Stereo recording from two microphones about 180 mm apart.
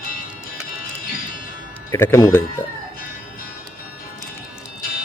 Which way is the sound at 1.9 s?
15° left (ahead or behind).